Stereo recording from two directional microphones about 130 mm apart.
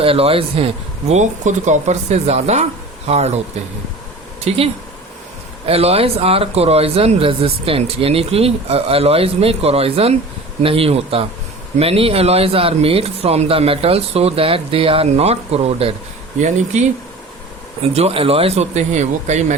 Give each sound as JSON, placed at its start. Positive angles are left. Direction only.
{"t": 0.0, "sound": "speech", "side_deg": -45}
{"t": 4.5, "sound": "speech", "side_deg": -55}
{"t": 5.6, "sound": "speech", "side_deg": -50}
{"t": 17.8, "sound": "speech", "side_deg": -50}